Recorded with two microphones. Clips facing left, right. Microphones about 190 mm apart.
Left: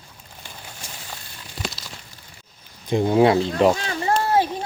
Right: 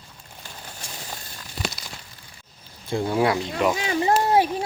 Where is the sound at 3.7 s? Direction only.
10° right (ahead or behind).